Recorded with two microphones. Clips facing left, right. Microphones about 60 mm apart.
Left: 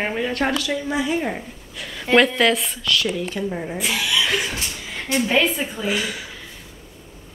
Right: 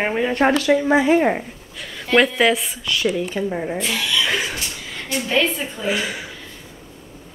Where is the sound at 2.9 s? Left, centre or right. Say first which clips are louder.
Right 1 dB; centre.